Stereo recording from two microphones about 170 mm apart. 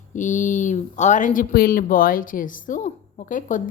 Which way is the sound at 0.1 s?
45° left (ahead or behind).